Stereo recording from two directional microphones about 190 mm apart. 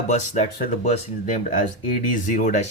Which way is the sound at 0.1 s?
35° left (ahead or behind).